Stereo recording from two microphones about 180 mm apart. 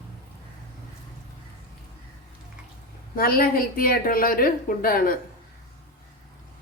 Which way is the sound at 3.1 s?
55° left (ahead or behind).